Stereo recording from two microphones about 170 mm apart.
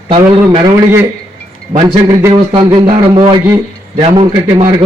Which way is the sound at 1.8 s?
25° right (ahead or behind).